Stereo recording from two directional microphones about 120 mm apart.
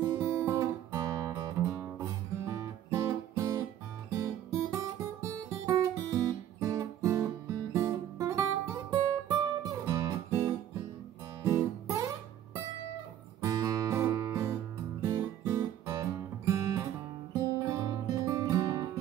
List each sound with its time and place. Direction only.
0.2 s music: 25° right (ahead or behind)
11.4 s guitar: 25° right (ahead or behind)
13.4 s music: 30° right (ahead or behind)